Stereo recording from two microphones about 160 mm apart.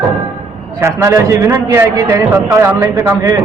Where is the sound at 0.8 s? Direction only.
15° right (ahead or behind).